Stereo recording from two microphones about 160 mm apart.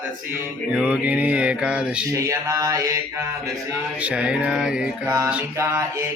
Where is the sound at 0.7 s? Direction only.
10° right (ahead or behind).